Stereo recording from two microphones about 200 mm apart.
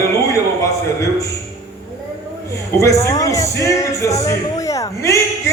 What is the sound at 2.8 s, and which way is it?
Speech, 15° left (ahead or behind).